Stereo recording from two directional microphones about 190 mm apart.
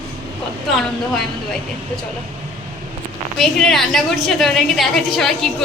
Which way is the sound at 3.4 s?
Centre (ahead or behind).